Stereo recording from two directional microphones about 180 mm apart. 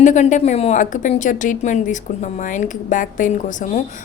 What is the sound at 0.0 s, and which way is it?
A woman's voice, 45° left (ahead or behind).